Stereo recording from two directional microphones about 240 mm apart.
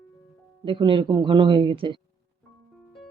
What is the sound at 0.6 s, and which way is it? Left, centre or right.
Speech, right.